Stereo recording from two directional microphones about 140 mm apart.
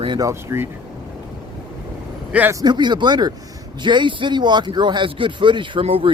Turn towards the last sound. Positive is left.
turn(degrees=-40)  # may be behind; listen again after turning